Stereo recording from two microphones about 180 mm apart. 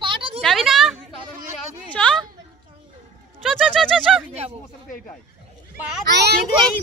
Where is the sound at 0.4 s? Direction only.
Centre (ahead or behind).